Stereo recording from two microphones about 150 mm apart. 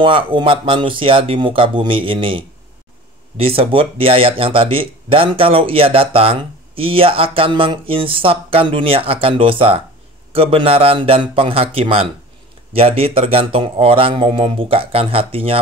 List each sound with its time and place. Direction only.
0.0 s speech: 35° right (ahead or behind)